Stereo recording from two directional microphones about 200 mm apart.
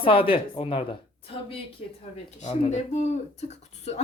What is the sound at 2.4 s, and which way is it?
Speech, 35° left (ahead or behind).